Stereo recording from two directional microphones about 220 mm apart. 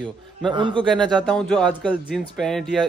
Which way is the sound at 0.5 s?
20° right (ahead or behind).